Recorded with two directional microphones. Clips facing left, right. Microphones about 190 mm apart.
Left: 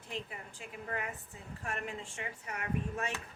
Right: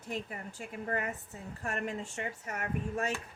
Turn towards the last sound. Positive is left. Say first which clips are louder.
# right 2 dB
turn(degrees=-45)  # may be behind; listen again after turning